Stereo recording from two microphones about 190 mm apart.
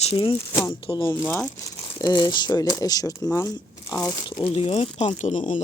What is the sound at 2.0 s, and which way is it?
Speech, 25° left (ahead or behind).